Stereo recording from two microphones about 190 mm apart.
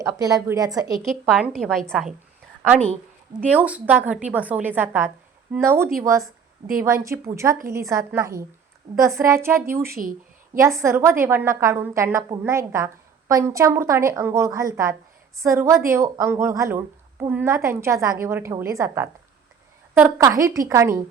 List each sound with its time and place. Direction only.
0.0 s a woman's voice: 20° right (ahead or behind)
1.3 s a woman's voice: centre (ahead or behind)
3.4 s a woman's voice: 5° right (ahead or behind)
9.9 s speech: 45° right (ahead or behind)
10.6 s a woman's voice: 15° right (ahead or behind)